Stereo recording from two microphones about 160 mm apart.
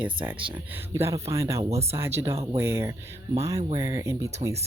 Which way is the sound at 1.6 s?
40° right (ahead or behind).